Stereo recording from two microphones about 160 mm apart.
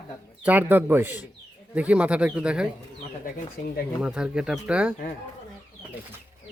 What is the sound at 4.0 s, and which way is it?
Speech, 5° right (ahead or behind).